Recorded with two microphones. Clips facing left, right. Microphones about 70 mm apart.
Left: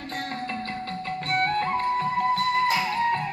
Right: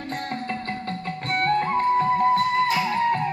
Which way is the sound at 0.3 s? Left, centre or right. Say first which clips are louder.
Right 2 dB; right.